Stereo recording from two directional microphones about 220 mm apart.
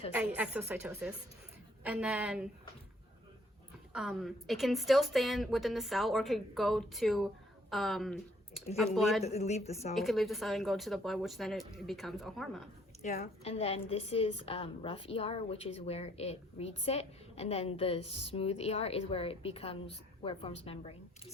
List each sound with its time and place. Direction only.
0.1 s a woman's voice: 5° right (ahead or behind)
3.9 s a woman's voice: centre (ahead or behind)
9.2 s a woman's voice: 30° left (ahead or behind)
9.9 s a woman's voice: centre (ahead or behind)
13.0 s a woman's voice: 35° left (ahead or behind)